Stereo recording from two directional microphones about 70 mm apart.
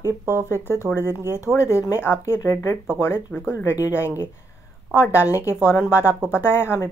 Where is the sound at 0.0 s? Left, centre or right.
Right.